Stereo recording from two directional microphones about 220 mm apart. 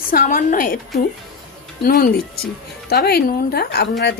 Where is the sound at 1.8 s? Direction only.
45° left (ahead or behind).